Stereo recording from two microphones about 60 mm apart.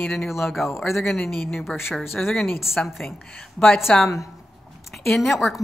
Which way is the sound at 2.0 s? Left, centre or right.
Left.